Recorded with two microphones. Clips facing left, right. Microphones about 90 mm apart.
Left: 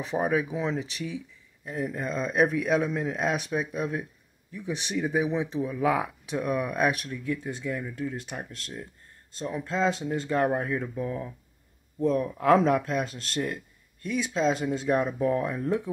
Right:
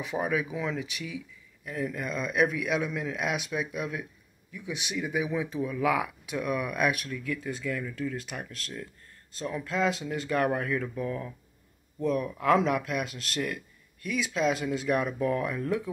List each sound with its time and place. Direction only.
0.0 s speech: 35° left (ahead or behind)